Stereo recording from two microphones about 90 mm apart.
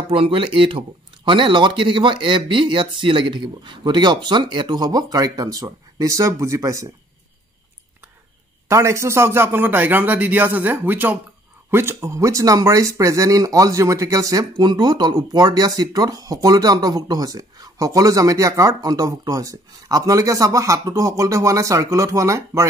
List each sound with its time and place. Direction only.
0.1 s a man's voice: 75° right (ahead or behind); by 4.8 s 60° right (ahead or behind)
4.8 s speech: 45° right (ahead or behind)
8.6 s a man's voice: 30° right (ahead or behind)
14.6 s speech: 50° right (ahead or behind); by 22.7 s 35° right (ahead or behind)